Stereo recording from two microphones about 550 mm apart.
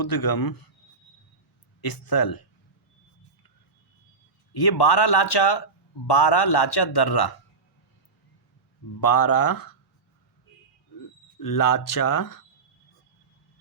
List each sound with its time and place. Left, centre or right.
0.0 s speech: left
1.8 s speech: left
4.5 s a man's voice: left
9.0 s speech: left
11.3 s speech: left